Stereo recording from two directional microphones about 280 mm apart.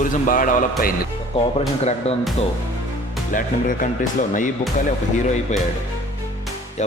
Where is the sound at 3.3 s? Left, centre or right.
Left.